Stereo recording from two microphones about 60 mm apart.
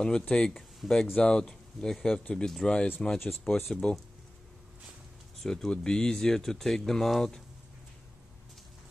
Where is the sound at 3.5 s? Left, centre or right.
Left.